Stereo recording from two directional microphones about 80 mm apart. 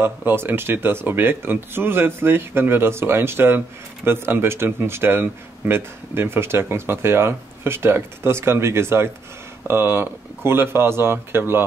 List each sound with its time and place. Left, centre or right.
0.0 s speech: right